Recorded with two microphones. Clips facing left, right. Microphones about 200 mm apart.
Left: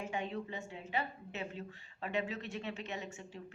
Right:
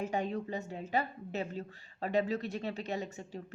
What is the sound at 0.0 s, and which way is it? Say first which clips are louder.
A woman's voice: right 5 dB; 40° right (ahead or behind).